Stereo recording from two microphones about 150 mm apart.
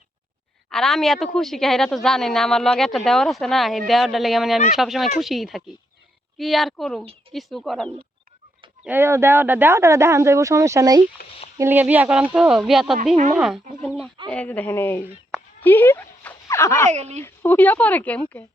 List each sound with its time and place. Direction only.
0.7 s a woman's voice: 5° left (ahead or behind)
7.0 s speech: 40° right (ahead or behind)
7.3 s a woman's voice: centre (ahead or behind)
8.8 s a woman's voice: 15° right (ahead or behind); by 15.0 s 15° left (ahead or behind)
15.3 s a sound: 15° left (ahead or behind)
16.9 s a woman's voice: 50° right (ahead or behind)
17.2 s speech: 15° left (ahead or behind)